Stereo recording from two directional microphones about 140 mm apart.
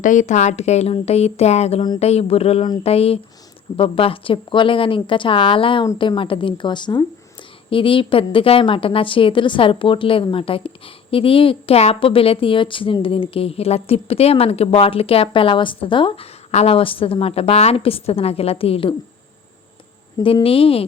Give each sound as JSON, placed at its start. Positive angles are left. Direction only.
{"t": 0.0, "sound": "a woman's voice", "side_deg": 60}
{"t": 20.2, "sound": "a woman's voice", "side_deg": 40}